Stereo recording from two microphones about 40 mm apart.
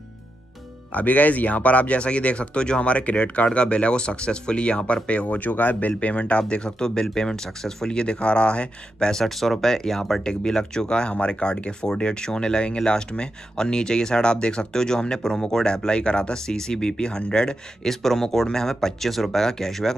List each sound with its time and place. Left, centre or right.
0.9 s speech: left
9.1 s speech: centre
10.2 s speech: centre